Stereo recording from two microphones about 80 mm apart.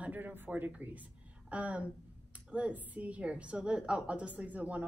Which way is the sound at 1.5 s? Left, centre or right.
Centre.